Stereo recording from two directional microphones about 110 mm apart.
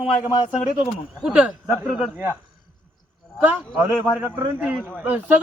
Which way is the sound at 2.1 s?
20° right (ahead or behind).